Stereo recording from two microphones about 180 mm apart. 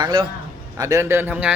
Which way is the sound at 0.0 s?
25° right (ahead or behind).